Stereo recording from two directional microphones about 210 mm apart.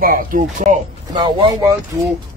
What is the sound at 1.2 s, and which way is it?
Speech, 20° right (ahead or behind).